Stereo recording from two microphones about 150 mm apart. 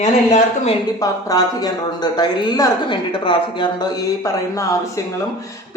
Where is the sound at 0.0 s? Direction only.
45° left (ahead or behind).